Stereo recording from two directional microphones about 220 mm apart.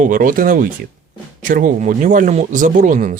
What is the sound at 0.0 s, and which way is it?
Speech, 40° right (ahead or behind).